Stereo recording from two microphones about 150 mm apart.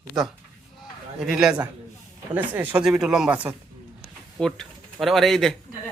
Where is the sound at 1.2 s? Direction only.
5° right (ahead or behind).